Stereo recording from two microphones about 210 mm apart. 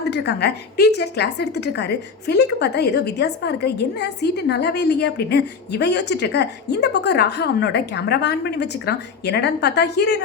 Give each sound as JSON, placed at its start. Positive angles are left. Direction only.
{"t": 0.0, "sound": "a woman's voice", "side_deg": 55}